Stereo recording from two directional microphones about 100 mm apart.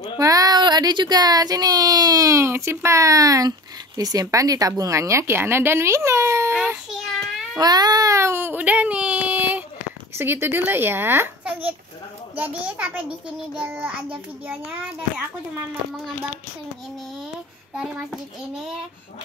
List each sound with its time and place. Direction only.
0.2 s speech: 35° right (ahead or behind)
6.6 s child singing: 5° right (ahead or behind)
7.5 s baby cry: 40° right (ahead or behind); by 9.7 s 15° right (ahead or behind)
10.1 s a child's voice: 25° right (ahead or behind)